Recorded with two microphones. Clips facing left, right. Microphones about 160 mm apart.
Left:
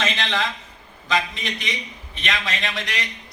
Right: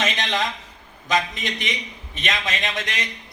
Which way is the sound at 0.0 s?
20° right (ahead or behind).